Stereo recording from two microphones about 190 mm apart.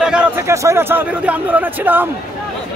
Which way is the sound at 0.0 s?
5° right (ahead or behind).